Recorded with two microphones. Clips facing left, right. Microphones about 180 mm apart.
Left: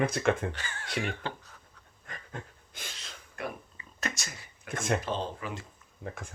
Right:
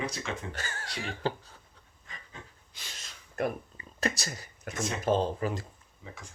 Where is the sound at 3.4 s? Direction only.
45° right (ahead or behind).